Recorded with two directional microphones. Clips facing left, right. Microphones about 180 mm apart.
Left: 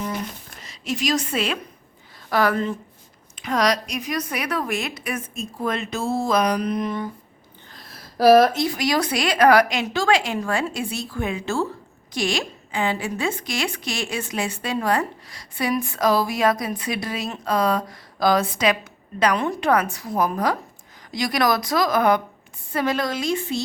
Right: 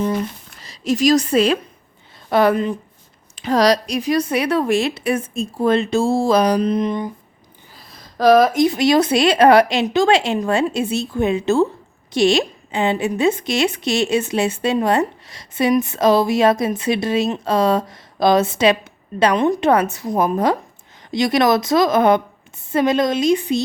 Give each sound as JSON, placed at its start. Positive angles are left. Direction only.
{"t": 0.6, "sound": "a woman's voice", "side_deg": -35}
{"t": 2.3, "sound": "a woman's voice", "side_deg": -25}
{"t": 3.3, "sound": "a woman's voice", "side_deg": -30}
{"t": 7.7, "sound": "a sound", "side_deg": 0}
{"t": 8.5, "sound": "a woman's voice", "side_deg": -20}